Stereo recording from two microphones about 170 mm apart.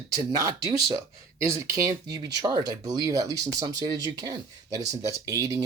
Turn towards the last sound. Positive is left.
turn(degrees=-20)  # may be behind; listen again after turning